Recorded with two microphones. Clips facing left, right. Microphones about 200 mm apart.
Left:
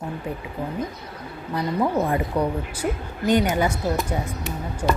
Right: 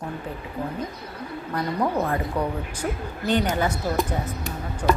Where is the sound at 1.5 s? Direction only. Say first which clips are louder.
Left 2 dB; 15° left (ahead or behind).